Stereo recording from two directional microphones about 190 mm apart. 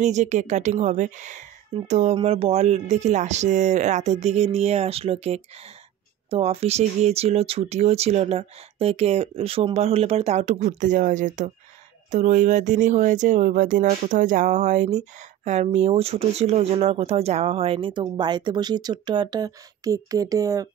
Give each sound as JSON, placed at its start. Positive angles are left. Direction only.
{"t": 0.0, "sound": "speech", "side_deg": -40}